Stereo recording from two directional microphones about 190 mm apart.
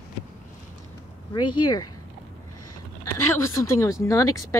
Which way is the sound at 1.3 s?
25° left (ahead or behind).